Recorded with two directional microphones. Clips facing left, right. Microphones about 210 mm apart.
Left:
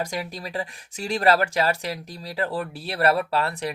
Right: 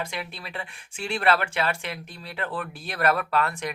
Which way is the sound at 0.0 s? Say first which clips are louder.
Left 4 dB; 40° left (ahead or behind).